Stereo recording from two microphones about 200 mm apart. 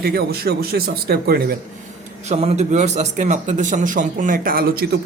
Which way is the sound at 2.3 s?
30° right (ahead or behind).